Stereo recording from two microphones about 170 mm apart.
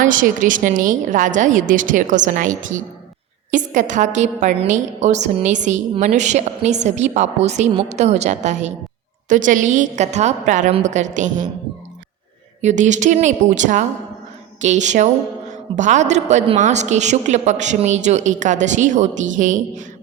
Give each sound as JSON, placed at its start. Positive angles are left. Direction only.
{"t": 0.0, "sound": "a woman's voice", "side_deg": -50}
{"t": 12.6, "sound": "a woman's voice", "side_deg": -45}